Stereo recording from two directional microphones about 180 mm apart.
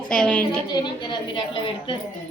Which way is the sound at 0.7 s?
25° left (ahead or behind).